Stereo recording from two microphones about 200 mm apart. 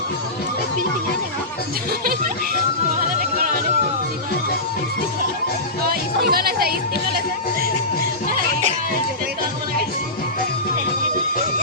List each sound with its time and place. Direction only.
5.9 s speech: 50° right (ahead or behind)